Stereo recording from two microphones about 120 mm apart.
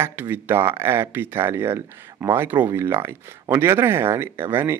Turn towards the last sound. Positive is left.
turn(degrees=-20)  # may be behind; listen again after turning